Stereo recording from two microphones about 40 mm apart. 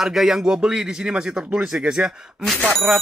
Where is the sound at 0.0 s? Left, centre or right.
Centre.